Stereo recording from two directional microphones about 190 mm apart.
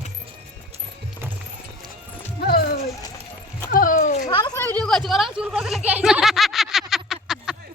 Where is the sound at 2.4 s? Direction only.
55° left (ahead or behind).